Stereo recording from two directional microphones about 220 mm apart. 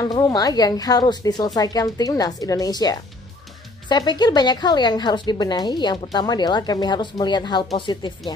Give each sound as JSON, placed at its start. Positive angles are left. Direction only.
{"t": 0.0, "sound": "a woman's voice", "side_deg": 20}